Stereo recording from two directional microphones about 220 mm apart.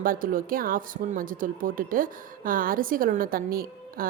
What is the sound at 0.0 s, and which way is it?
Speech, 40° right (ahead or behind).